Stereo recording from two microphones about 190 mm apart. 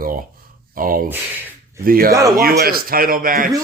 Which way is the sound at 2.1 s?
15° right (ahead or behind).